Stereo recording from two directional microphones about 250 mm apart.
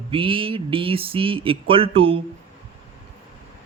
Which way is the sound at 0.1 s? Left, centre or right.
Right.